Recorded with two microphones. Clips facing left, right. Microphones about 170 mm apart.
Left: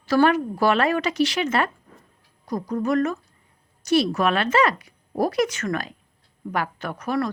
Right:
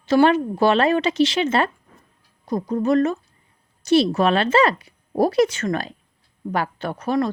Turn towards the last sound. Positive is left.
turn(degrees=-25)  # may be behind; listen again after turning